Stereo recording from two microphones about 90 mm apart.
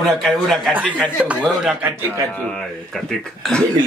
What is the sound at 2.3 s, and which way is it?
Speech, 10° left (ahead or behind).